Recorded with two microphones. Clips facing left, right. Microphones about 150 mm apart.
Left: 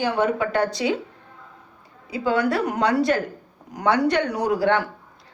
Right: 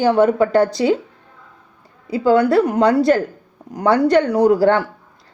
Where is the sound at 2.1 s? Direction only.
40° right (ahead or behind).